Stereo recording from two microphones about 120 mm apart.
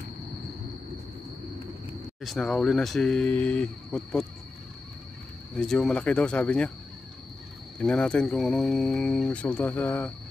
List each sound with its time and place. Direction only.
2.2 s speech: 5° left (ahead or behind)
5.6 s speech: 5° left (ahead or behind)
7.8 s speech: 10° left (ahead or behind)